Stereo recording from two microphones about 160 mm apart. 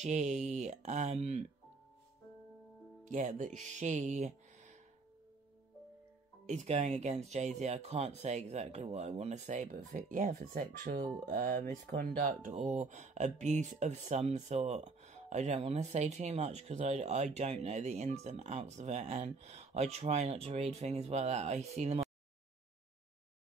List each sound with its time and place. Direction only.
0.0 s speech: 45° right (ahead or behind)
3.1 s speech: 50° right (ahead or behind)
6.4 s speech: 45° right (ahead or behind)
11.0 s speech: 25° right (ahead or behind)
11.2 s speech: 60° right (ahead or behind)
12.2 s speech: 55° right (ahead or behind)